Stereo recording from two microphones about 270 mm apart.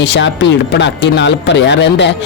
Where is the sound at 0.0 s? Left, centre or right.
Left.